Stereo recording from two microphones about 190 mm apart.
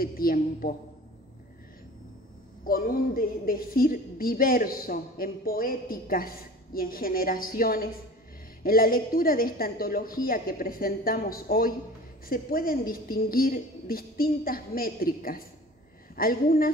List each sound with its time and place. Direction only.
0.0 s a woman's voice: 50° left (ahead or behind)
2.6 s a woman's voice: 50° left (ahead or behind)